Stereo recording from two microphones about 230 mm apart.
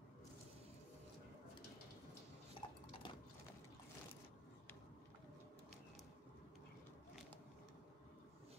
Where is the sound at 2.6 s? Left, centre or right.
Left.